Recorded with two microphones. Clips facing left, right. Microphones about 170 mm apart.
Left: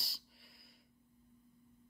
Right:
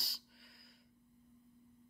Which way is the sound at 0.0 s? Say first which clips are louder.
Right 1 dB; centre (ahead or behind).